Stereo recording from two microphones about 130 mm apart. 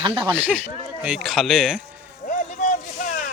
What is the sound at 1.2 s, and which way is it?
Speech, centre (ahead or behind).